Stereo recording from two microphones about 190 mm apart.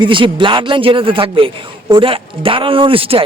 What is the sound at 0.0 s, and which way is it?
A man's voice, 25° right (ahead or behind).